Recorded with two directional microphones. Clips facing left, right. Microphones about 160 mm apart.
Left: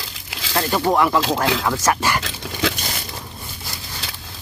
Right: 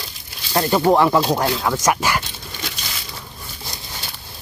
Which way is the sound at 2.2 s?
90° left.